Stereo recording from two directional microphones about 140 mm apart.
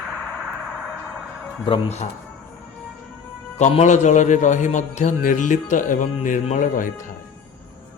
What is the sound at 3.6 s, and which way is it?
A man's voice, 60° left (ahead or behind).